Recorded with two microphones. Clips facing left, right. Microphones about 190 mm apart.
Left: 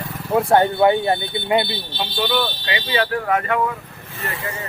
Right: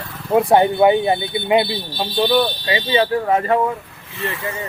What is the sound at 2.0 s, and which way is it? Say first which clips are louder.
Speech: right 5 dB; 35° right (ahead or behind).